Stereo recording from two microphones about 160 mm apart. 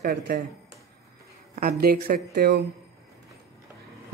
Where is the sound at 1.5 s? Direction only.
75° right (ahead or behind).